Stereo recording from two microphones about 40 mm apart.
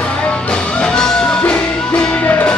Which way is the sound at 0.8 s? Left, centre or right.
Centre.